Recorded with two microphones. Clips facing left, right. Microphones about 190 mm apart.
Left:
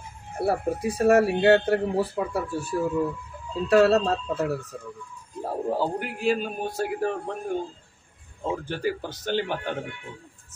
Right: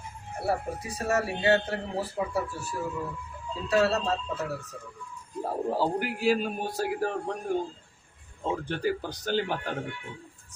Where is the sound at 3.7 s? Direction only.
55° left (ahead or behind).